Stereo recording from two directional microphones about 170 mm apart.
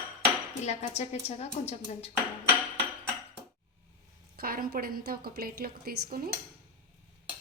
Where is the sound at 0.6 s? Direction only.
40° left (ahead or behind).